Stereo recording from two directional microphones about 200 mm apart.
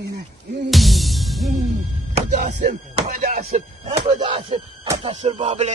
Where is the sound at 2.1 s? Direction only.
40° right (ahead or behind).